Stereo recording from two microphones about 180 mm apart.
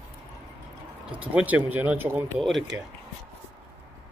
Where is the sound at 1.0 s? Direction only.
5° right (ahead or behind).